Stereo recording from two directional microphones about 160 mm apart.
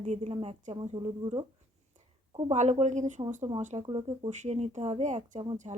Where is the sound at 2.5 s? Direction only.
45° right (ahead or behind).